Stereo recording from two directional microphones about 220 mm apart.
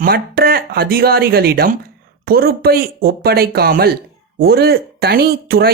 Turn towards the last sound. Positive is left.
turn(degrees=-45)  # may be behind; listen again after turning